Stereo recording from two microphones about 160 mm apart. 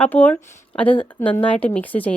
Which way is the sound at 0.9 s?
35° left (ahead or behind).